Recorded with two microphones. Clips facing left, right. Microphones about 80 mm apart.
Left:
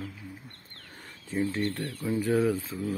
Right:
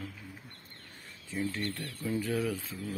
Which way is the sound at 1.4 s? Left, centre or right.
Left.